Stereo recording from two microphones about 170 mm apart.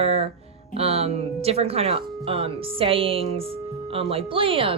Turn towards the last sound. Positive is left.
turn(degrees=-30)  # may be behind; listen again after turning